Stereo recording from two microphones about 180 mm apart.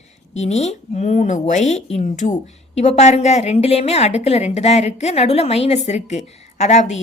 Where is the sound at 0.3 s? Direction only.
40° left (ahead or behind).